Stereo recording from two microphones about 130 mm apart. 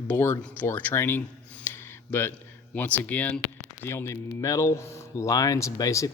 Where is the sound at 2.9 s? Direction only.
10° left (ahead or behind).